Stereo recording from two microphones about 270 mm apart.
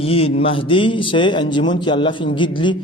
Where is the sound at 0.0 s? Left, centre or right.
Left.